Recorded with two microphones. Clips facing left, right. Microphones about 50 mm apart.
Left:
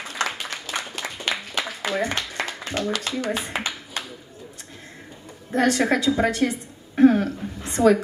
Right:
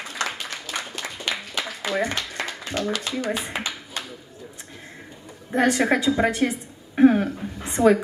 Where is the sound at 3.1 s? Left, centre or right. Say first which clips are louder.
Even; left.